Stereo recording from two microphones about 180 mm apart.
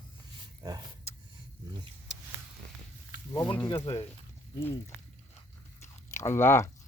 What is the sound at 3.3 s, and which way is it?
Speech, 20° left (ahead or behind).